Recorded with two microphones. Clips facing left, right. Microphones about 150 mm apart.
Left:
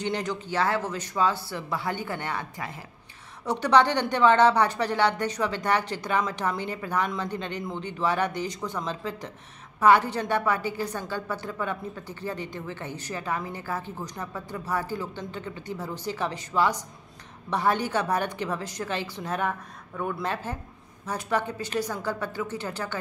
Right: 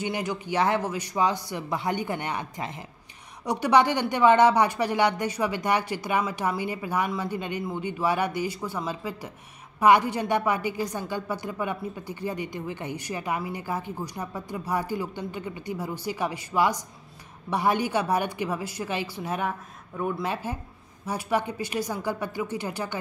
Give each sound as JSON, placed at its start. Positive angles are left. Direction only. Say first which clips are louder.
{"t": 0.0, "sound": "a woman's voice", "louder": "even", "side_deg": -10}